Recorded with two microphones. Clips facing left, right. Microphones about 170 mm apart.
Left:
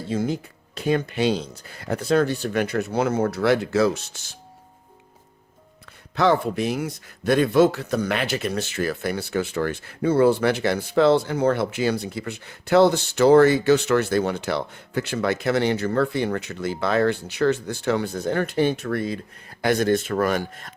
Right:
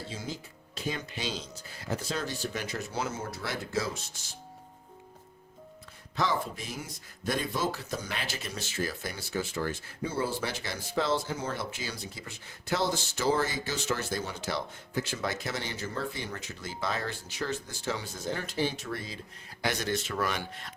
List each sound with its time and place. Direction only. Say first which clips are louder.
0.1 s speech: left 14 dB; 55° left (ahead or behind); by 4.4 s 75° left (ahead or behind)
6.1 s speech: left 11 dB; 65° left (ahead or behind); by 20.7 s 45° left (ahead or behind)